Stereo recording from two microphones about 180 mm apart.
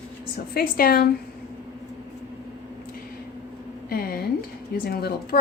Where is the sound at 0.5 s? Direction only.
55° left (ahead or behind).